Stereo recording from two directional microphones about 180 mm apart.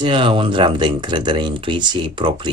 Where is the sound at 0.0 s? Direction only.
25° right (ahead or behind).